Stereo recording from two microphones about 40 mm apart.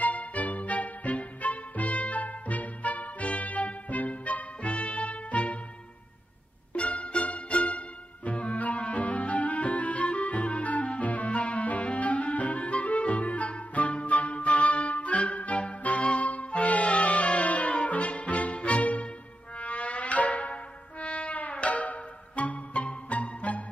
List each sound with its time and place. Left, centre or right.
0.0 s music: left
6.7 s music: left